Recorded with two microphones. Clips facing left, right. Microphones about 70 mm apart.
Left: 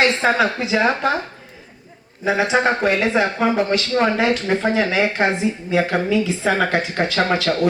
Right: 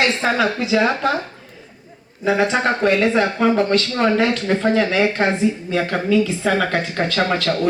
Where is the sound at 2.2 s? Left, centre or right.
Centre.